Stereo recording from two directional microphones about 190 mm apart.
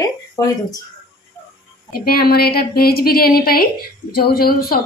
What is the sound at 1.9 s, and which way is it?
A woman's voice, 50° left (ahead or behind).